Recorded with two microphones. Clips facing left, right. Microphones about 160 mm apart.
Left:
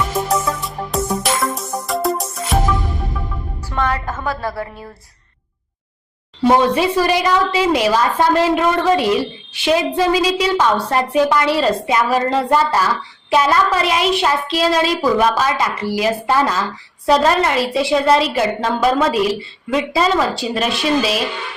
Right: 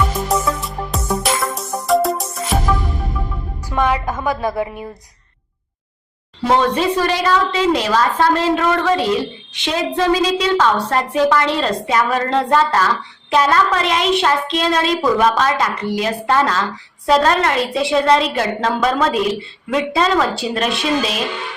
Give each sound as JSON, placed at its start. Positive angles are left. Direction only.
{"t": 0.3, "sound": "music", "side_deg": 0}
{"t": 3.7, "sound": "a woman's voice", "side_deg": -10}
{"t": 6.5, "sound": "a woman's voice", "side_deg": 10}